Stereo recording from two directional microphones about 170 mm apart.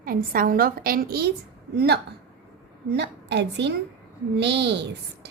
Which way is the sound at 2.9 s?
90° right.